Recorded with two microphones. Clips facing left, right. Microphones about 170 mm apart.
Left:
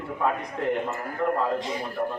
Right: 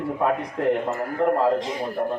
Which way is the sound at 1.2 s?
30° right (ahead or behind).